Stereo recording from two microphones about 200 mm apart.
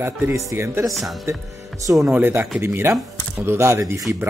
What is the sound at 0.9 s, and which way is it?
Speech, centre (ahead or behind).